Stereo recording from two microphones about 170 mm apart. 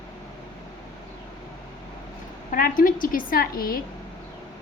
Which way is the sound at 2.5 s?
55° left (ahead or behind).